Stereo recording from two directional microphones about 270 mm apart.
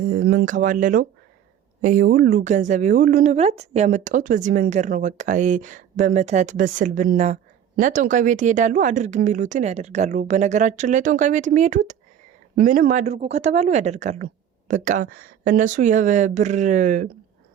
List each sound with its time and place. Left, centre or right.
0.0 s a woman's voice: right